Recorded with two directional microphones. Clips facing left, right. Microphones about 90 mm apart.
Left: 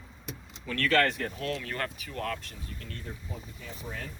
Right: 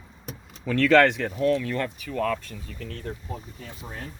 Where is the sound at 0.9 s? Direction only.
90° right.